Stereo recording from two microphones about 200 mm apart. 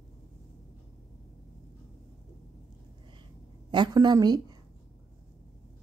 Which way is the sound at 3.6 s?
20° right (ahead or behind).